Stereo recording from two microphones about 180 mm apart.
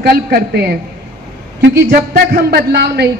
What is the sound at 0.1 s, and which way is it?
Speech, 55° right (ahead or behind).